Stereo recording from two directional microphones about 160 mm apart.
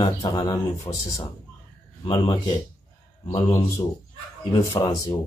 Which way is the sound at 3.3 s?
20° left (ahead or behind).